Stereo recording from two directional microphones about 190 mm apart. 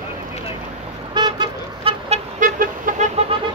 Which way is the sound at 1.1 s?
25° right (ahead or behind).